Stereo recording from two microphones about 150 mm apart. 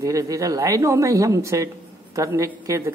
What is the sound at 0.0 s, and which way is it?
Speech, 20° right (ahead or behind).